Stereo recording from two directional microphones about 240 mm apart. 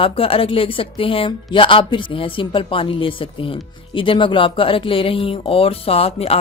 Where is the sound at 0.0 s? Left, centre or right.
Left.